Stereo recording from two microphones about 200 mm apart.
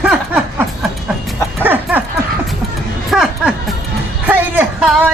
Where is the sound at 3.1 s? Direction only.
5° right (ahead or behind).